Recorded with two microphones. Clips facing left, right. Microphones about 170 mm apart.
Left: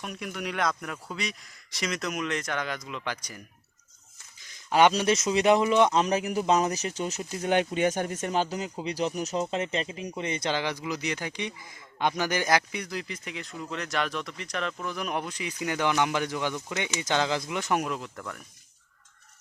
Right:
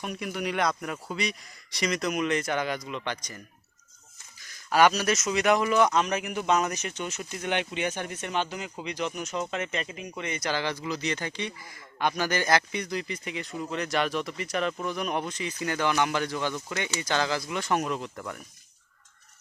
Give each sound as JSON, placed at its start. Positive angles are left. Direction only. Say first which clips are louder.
{"t": 0.0, "sound": "speech", "louder": "right 3 dB", "side_deg": 0}
{"t": 4.7, "sound": "speech", "louder": "left 1 dB", "side_deg": 25}
{"t": 10.5, "sound": "speech", "louder": "even", "side_deg": 15}
{"t": 17.8, "sound": "speech", "louder": "right 2 dB", "side_deg": 0}